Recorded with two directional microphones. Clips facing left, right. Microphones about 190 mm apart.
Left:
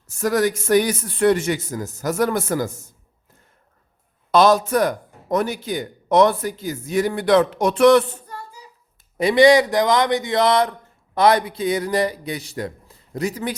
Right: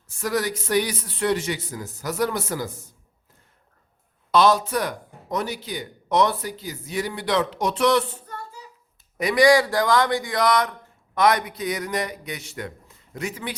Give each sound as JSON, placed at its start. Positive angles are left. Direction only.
{"t": 0.1, "sound": "speech", "side_deg": 45}
{"t": 4.3, "sound": "speech", "side_deg": 45}
{"t": 9.1, "sound": "speech", "side_deg": 25}